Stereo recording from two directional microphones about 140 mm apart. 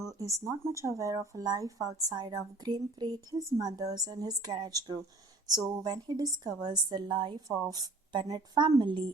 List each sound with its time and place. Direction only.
0.0 s a woman's voice: 25° right (ahead or behind)